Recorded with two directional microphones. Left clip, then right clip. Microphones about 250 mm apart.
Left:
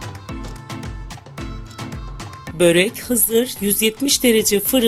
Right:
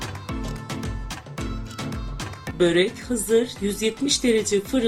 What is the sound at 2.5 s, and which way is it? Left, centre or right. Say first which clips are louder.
Speech: left 5 dB; left.